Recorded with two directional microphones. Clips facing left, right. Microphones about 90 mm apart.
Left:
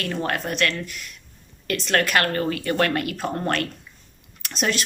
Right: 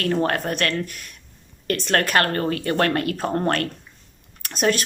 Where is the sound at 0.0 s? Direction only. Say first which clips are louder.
Right 4 dB; 40° right (ahead or behind).